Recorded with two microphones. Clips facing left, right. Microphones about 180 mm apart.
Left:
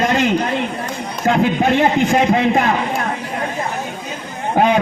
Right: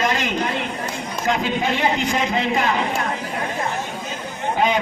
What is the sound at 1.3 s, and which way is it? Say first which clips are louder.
A man's voice: left 7 dB; 50° left (ahead or behind).